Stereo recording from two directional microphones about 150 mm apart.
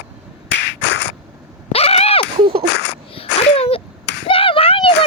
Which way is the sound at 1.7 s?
45° left (ahead or behind).